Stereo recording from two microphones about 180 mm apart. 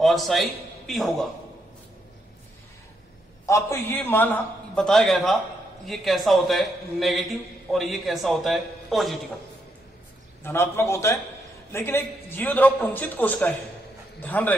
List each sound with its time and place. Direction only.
0.0 s a man's voice: centre (ahead or behind)
3.4 s a man's voice: 15° left (ahead or behind); by 9.2 s centre (ahead or behind)
10.4 s a man's voice: 15° left (ahead or behind)